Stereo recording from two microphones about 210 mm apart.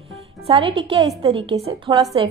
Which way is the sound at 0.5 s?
25° right (ahead or behind).